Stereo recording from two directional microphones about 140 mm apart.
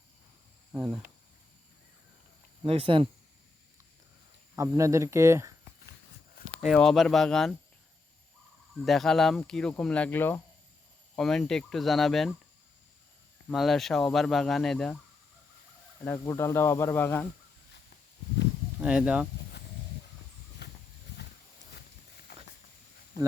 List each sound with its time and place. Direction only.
0.7 s speech: 5° right (ahead or behind)
2.6 s speech: 40° right (ahead or behind)
4.5 s speech: 20° right (ahead or behind)
6.4 s a sound: 90° left
6.7 s speech: centre (ahead or behind)
8.7 s speech: centre (ahead or behind)
11.2 s speech: 5° left (ahead or behind)
13.5 s speech: centre (ahead or behind)
16.1 s speech: 20° left (ahead or behind)
18.8 s speech: 10° right (ahead or behind)
22.3 s a sound: 90° left